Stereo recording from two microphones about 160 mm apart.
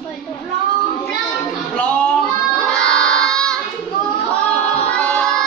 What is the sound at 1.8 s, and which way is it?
Child singing, 5° left (ahead or behind).